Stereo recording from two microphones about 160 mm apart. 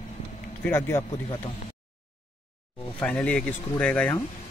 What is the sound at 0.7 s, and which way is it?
Speech, 15° left (ahead or behind).